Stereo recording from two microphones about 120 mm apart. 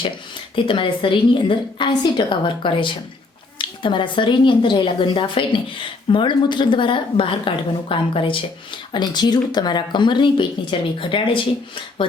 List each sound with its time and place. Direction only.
0.5 s a woman's voice: 45° left (ahead or behind)